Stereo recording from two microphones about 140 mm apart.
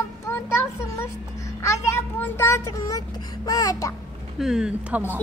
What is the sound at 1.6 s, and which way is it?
A child's voice, 20° left (ahead or behind).